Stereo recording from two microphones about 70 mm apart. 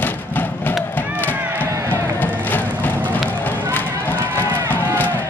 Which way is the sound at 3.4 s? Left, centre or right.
Left.